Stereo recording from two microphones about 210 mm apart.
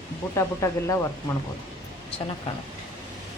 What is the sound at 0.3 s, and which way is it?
Speech, 15° left (ahead or behind).